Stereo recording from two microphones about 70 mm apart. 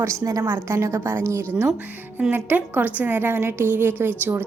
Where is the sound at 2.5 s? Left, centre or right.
Right.